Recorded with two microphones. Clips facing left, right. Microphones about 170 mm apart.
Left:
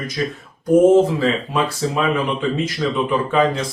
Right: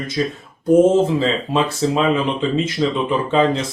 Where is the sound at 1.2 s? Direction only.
25° right (ahead or behind).